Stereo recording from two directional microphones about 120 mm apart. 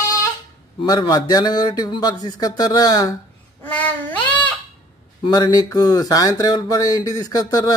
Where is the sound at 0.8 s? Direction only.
35° left (ahead or behind).